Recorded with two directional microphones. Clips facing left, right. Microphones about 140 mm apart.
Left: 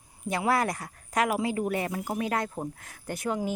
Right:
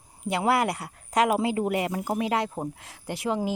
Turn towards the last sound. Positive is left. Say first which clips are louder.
# right 2 dB
turn(degrees=-25)  # may be behind; listen again after turning